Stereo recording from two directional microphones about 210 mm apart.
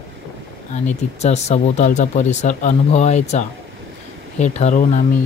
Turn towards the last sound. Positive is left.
turn(degrees=35)  # may be behind; listen again after turning